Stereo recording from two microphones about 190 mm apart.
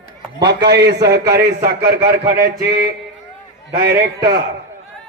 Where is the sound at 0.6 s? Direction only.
60° right (ahead or behind).